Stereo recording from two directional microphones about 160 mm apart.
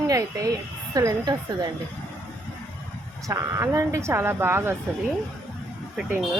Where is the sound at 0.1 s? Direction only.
20° right (ahead or behind).